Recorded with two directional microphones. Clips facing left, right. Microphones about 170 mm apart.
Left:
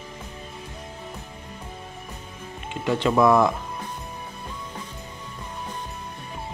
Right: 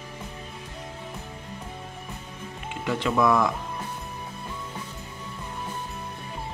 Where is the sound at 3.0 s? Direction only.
30° left (ahead or behind).